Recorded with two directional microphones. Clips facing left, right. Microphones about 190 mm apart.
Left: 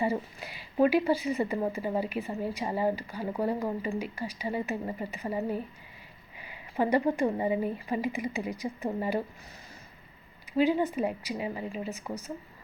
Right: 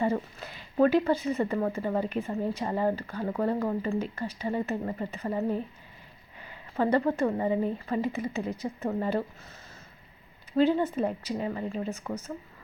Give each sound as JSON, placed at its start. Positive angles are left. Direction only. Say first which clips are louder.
{"t": 0.0, "sound": "a woman's voice", "louder": "right 2 dB", "side_deg": 10}
{"t": 10.6, "sound": "a woman's voice", "louder": "right 1 dB", "side_deg": 10}